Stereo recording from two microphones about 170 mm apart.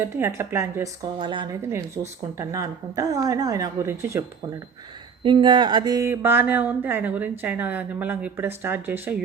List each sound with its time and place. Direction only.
0.0 s speech: 15° right (ahead or behind)
5.2 s speech: 25° right (ahead or behind)